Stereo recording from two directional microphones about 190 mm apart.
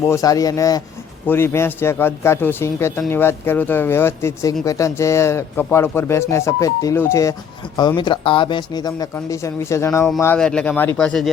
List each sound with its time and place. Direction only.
0.1 s speech: 20° left (ahead or behind)